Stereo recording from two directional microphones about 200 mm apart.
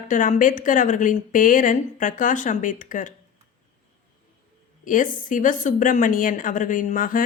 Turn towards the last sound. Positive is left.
turn(degrees=40)  # may be behind; listen again after turning